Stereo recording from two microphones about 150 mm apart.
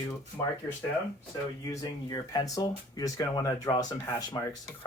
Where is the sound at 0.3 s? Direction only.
10° left (ahead or behind).